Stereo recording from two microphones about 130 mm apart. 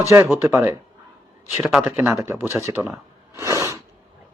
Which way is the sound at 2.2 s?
20° right (ahead or behind).